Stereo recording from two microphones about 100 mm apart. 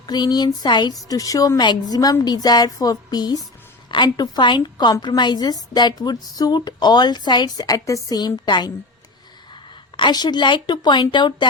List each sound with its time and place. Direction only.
0.1 s a woman's voice: 45° left (ahead or behind)
10.0 s a woman's voice: 45° left (ahead or behind)